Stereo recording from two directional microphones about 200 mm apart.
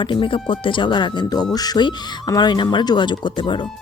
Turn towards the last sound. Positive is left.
turn(degrees=25)  # may be behind; listen again after turning